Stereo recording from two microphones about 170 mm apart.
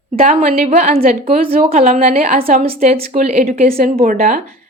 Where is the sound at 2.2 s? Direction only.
35° right (ahead or behind); by 4.2 s 55° right (ahead or behind).